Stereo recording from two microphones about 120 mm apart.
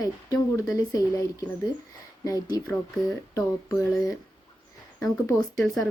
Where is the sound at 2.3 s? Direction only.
30° left (ahead or behind).